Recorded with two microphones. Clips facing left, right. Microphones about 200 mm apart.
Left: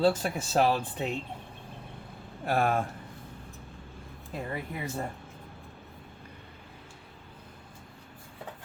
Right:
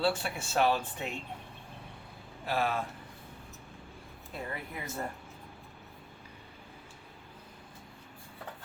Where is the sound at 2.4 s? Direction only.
50° left (ahead or behind).